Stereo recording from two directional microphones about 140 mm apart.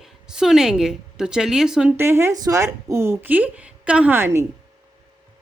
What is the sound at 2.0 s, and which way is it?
Speech, 15° right (ahead or behind).